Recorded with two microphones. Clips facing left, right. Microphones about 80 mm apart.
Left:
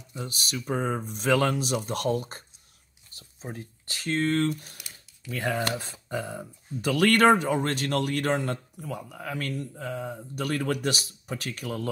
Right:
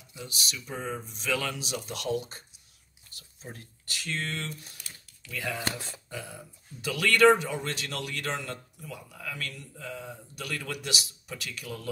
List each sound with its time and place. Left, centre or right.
0.1 s speech: left
3.2 s speech: left